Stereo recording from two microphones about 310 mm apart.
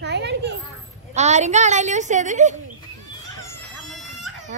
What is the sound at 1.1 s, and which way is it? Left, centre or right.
A woman's voice, right.